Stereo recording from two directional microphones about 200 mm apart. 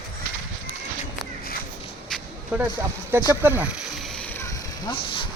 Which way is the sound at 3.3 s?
10° right (ahead or behind).